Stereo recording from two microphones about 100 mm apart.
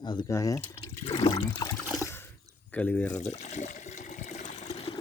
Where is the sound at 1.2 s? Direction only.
55° left (ahead or behind).